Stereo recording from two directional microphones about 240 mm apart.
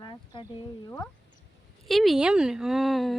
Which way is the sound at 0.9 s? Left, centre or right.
Centre.